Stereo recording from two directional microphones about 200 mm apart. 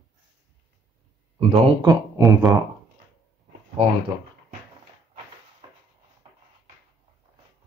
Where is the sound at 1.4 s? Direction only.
20° right (ahead or behind).